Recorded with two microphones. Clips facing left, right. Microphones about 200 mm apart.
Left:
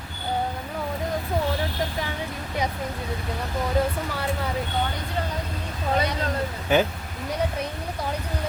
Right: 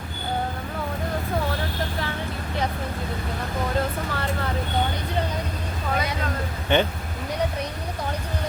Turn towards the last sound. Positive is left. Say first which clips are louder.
# even
turn(degrees=5)  # may be behind; listen again after turning